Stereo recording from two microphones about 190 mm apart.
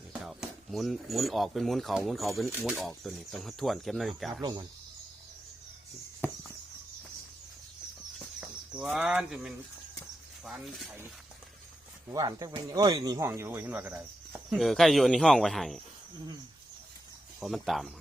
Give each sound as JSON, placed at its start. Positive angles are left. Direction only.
{"t": 0.1, "sound": "speech", "side_deg": -5}
{"t": 4.3, "sound": "speech", "side_deg": -20}
{"t": 6.2, "sound": "a sound", "side_deg": 10}
{"t": 8.7, "sound": "speech", "side_deg": -5}
{"t": 12.0, "sound": "speech", "side_deg": -20}
{"t": 17.4, "sound": "speech", "side_deg": 0}